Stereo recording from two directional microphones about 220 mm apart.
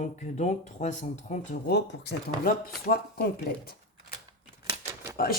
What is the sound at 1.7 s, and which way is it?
Speech, 50° left (ahead or behind).